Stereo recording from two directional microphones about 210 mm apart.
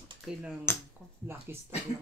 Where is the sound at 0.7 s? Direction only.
10° left (ahead or behind).